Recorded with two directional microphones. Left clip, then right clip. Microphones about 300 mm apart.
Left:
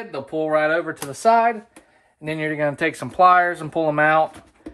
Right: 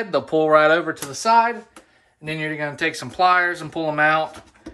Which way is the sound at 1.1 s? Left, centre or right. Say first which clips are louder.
Even; centre.